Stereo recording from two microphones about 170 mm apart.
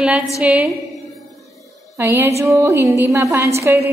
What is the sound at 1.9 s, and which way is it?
Music, 15° right (ahead or behind).